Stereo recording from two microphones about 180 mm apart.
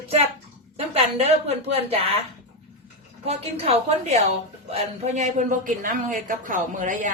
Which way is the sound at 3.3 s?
35° right (ahead or behind).